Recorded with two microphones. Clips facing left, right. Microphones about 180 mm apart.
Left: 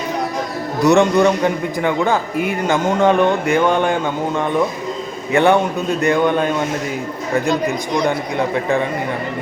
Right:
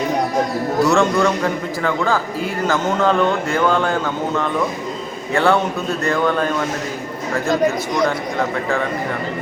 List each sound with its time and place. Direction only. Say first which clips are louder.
0.8 s a man's voice: left 4 dB; 20° left (ahead or behind)